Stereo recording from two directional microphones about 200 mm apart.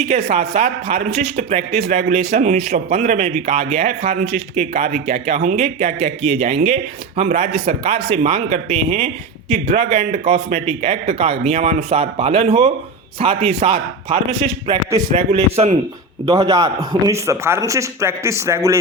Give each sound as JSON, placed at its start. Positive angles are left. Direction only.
{"t": 0.0, "sound": "speech", "side_deg": -35}
{"t": 14.7, "sound": "a man's voice", "side_deg": -15}
{"t": 15.1, "sound": "speech", "side_deg": -30}
{"t": 16.2, "sound": "a man's voice", "side_deg": -15}